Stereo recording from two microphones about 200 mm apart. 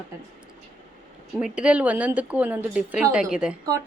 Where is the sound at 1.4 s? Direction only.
5° right (ahead or behind).